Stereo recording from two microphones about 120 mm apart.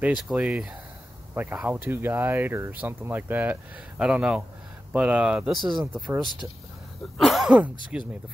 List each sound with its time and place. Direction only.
0.0 s speech: 5° right (ahead or behind)
7.2 s speech: centre (ahead or behind)
7.5 s speech: 10° right (ahead or behind)